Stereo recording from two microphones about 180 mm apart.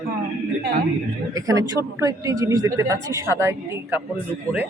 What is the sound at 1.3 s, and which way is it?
Speech, 20° right (ahead or behind).